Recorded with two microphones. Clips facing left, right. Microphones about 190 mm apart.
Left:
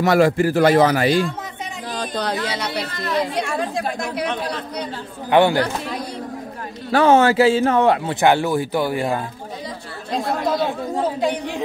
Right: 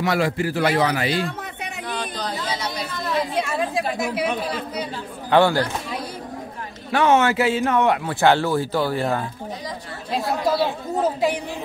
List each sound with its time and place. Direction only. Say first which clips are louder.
0.0 s a man's voice: left 6 dB; 45° left (ahead or behind)
2.1 s a sound: left 4 dB; 70° left (ahead or behind)
3.3 s speech: even; 5° right (ahead or behind)
5.3 s speech: left 2 dB; 15° left (ahead or behind)
6.9 s a man's voice: left 4 dB; 35° left (ahead or behind)
8.1 s speech: left 1 dB; 15° left (ahead or behind)
10.1 s speech: even; 10° right (ahead or behind)